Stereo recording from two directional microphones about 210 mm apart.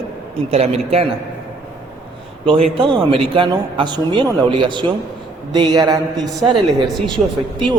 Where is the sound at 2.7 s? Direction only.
25° right (ahead or behind).